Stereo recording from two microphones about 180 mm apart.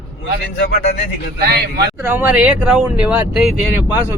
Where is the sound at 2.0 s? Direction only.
10° right (ahead or behind).